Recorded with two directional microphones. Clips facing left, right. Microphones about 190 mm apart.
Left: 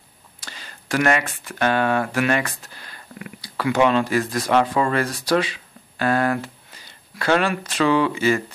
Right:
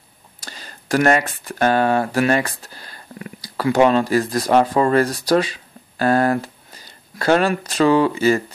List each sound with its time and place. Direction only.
0.4 s speech: 40° right (ahead or behind)